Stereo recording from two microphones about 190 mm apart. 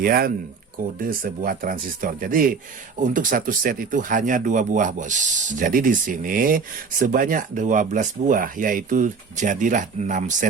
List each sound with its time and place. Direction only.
0.0 s speech: 50° right (ahead or behind)